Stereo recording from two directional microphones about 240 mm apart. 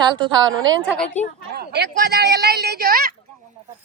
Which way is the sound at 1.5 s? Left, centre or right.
Right.